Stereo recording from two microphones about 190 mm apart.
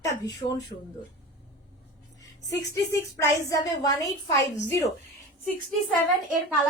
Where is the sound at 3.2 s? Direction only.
20° left (ahead or behind).